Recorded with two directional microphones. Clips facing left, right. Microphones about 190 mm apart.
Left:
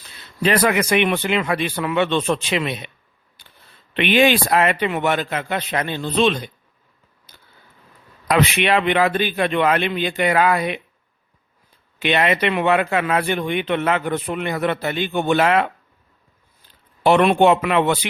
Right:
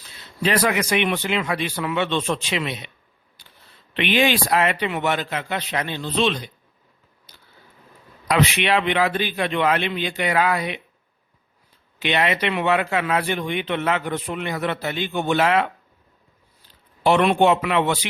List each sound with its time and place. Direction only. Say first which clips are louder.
0.4 s speech: left 3 dB; 55° left (ahead or behind)
3.4 s a sound: left 1 dB; 60° left (ahead or behind)
3.9 s a man's voice: left 4 dB; 55° left (ahead or behind)
8.3 s a man's voice: left 2 dB; 55° left (ahead or behind)
11.9 s a man's voice: left 3 dB; 55° left (ahead or behind)
17.0 s speech: left 3 dB; 55° left (ahead or behind)